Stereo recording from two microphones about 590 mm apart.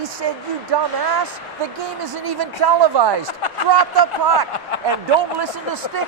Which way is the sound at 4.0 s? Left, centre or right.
Right.